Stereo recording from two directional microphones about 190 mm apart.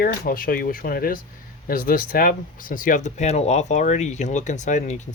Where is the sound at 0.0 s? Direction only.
50° left (ahead or behind).